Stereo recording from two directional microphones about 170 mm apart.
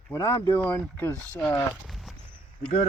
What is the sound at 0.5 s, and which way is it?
Speech, 10° left (ahead or behind).